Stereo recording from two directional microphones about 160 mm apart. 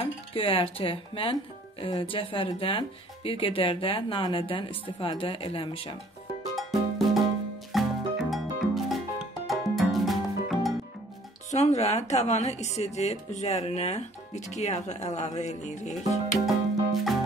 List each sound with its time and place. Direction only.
0.0 s speech: 35° left (ahead or behind)
6.5 s music: centre (ahead or behind)
11.5 s speech: 45° left (ahead or behind)
16.4 s music: centre (ahead or behind)